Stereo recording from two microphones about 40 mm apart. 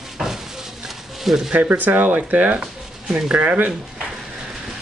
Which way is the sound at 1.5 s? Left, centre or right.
Right.